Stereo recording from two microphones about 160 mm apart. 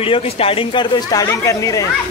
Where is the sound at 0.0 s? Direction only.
35° left (ahead or behind); by 1.9 s 20° left (ahead or behind).